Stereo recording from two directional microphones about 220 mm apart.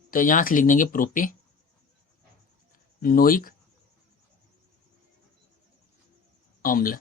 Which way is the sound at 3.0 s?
40° left (ahead or behind).